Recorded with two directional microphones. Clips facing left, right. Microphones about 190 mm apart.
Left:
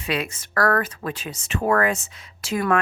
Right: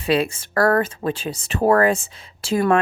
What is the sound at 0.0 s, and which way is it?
Speech, 30° right (ahead or behind).